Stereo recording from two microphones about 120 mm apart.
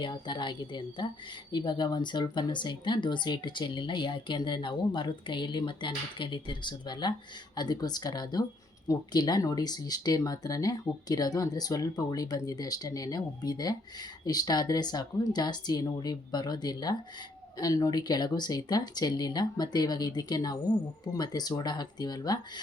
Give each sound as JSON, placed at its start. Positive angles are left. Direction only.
{"t": 0.0, "sound": "speech", "side_deg": 40}